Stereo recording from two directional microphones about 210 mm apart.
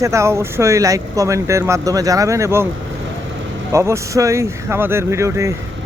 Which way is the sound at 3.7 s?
15° right (ahead or behind).